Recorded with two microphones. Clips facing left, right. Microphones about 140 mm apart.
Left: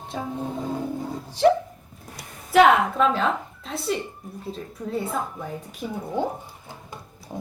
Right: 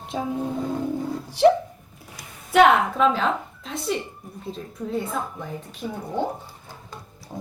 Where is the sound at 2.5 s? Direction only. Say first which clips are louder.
Even; centre (ahead or behind).